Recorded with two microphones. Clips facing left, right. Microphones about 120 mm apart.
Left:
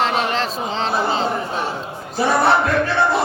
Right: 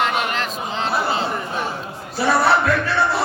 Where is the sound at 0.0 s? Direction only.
30° left (ahead or behind).